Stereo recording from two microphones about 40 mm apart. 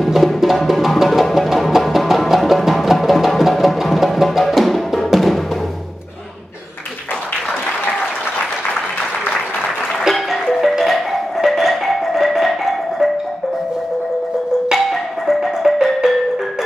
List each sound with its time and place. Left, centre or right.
0.0 s music: centre
10.0 s music: centre
11.4 s marimba: centre
14.7 s marimba: centre